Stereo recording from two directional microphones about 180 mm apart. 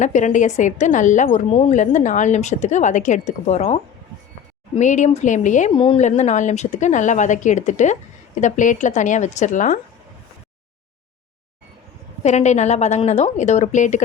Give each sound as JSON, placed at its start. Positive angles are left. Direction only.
{"t": 0.0, "sound": "a woman's voice", "side_deg": 40}
{"t": 4.8, "sound": "a woman's voice", "side_deg": 40}
{"t": 5.7, "sound": "a woman's voice", "side_deg": 30}
{"t": 6.0, "sound": "a woman's voice", "side_deg": 40}
{"t": 12.2, "sound": "a woman's voice", "side_deg": 40}